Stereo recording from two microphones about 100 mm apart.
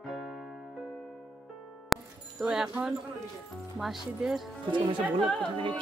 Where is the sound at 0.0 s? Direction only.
Centre (ahead or behind).